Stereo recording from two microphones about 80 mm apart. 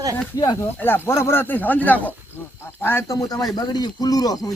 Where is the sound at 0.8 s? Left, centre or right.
Left.